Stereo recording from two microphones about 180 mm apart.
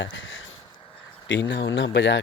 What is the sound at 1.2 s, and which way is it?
Speech, 85° left.